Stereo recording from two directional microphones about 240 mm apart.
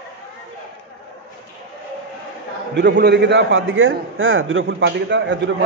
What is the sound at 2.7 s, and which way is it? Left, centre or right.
A man's voice, right.